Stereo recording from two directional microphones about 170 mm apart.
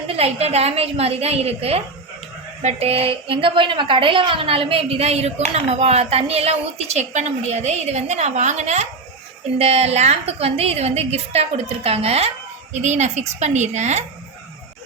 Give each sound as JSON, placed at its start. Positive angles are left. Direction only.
{"t": 0.1, "sound": "a woman's voice", "side_deg": -35}